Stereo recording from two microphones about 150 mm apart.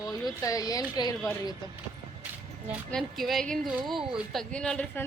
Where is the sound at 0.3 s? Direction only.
25° left (ahead or behind).